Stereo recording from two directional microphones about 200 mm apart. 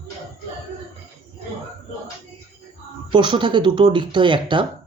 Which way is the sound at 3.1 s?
25° right (ahead or behind).